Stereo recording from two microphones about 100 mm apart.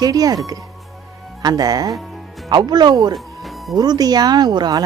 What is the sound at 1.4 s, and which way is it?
Speech, 40° right (ahead or behind).